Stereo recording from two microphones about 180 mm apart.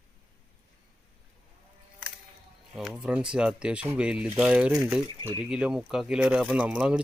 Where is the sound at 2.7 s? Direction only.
5° right (ahead or behind).